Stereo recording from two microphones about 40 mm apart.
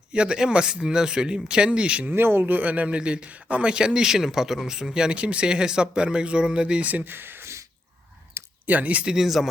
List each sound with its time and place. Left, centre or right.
0.1 s speech: right
2.0 s speech: right
2.6 s speech: right; by 5.1 s centre
5.1 s speech: right
7.0 s speech: right
8.6 s speech: right
9.1 s speech: centre